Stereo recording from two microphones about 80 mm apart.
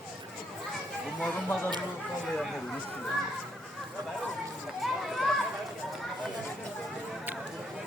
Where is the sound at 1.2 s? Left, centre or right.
Centre.